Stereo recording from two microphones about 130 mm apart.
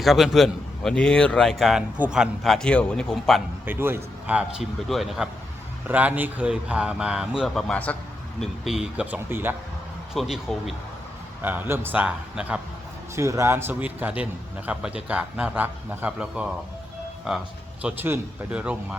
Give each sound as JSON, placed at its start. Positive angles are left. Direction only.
{"t": 0.0, "sound": "a man's voice", "side_deg": 0}
{"t": 3.7, "sound": "a man's voice", "side_deg": -15}
{"t": 8.4, "sound": "speech", "side_deg": -5}
{"t": 10.2, "sound": "a man's voice", "side_deg": 0}
{"t": 11.4, "sound": "speech", "side_deg": -15}
{"t": 13.1, "sound": "speech", "side_deg": -20}
{"t": 17.8, "sound": "speech", "side_deg": -10}